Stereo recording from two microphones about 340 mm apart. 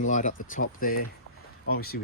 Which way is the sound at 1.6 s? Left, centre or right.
Left.